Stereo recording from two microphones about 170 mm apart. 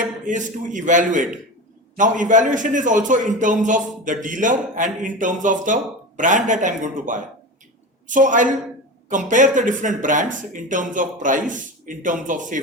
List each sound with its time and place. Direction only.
0.3 s a man's voice: 50° right (ahead or behind)